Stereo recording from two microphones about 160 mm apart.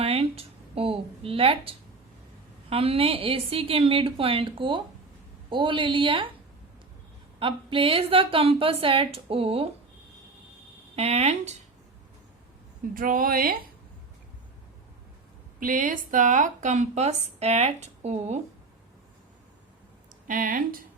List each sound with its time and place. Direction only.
0.0 s speech: 40° right (ahead or behind)
7.3 s speech: 35° right (ahead or behind)
10.9 s a woman's voice: 40° right (ahead or behind)
12.9 s a woman's voice: 60° right (ahead or behind)
15.6 s a woman's voice: 55° right (ahead or behind)
20.2 s a woman's voice: 55° right (ahead or behind)